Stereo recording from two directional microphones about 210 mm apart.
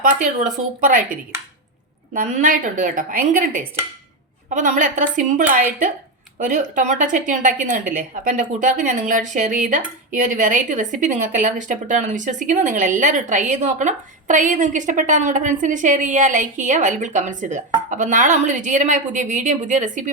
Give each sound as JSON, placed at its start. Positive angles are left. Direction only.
{"t": 0.0, "sound": "speech", "side_deg": -35}
{"t": 2.1, "sound": "speech", "side_deg": -40}